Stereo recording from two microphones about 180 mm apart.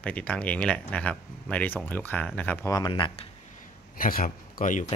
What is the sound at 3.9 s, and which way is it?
Speech, 50° left (ahead or behind).